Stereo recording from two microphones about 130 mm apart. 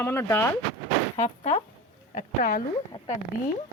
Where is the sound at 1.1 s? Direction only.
55° left (ahead or behind).